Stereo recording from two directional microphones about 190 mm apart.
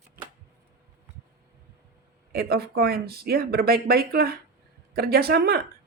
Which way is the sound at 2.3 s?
55° right (ahead or behind).